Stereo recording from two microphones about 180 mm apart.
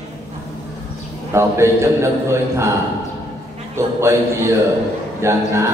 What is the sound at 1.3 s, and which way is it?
A man's voice, 15° right (ahead or behind).